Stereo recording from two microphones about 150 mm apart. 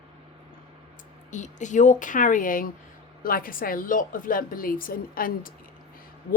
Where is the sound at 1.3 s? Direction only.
55° left (ahead or behind).